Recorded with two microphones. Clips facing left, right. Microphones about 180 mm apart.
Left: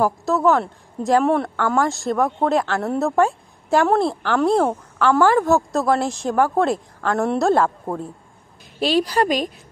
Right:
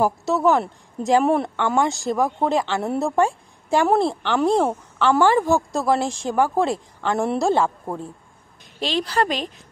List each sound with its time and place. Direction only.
0.0 s a woman's voice: centre (ahead or behind)